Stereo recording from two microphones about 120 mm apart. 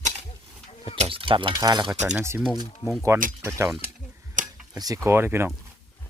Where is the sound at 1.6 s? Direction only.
30° right (ahead or behind).